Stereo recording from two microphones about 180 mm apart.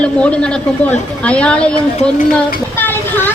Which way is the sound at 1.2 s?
5° left (ahead or behind).